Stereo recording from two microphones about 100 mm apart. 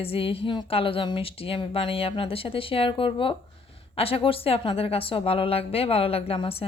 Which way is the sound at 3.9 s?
75° left (ahead or behind).